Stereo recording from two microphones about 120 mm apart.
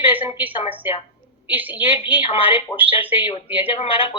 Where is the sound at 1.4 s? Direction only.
15° right (ahead or behind).